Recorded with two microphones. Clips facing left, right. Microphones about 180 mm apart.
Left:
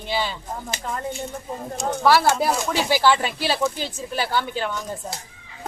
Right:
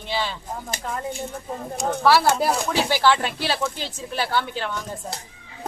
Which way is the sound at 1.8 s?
Centre (ahead or behind).